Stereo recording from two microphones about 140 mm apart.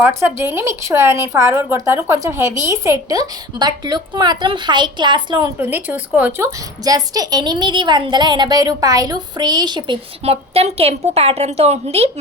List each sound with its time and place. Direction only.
0.0 s a woman's voice: 20° right (ahead or behind)
5.5 s a woman's voice: 15° right (ahead or behind); by 12.1 s 45° right (ahead or behind)